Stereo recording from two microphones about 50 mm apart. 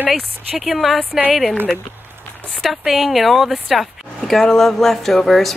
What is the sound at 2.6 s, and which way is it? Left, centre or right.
Speech, centre.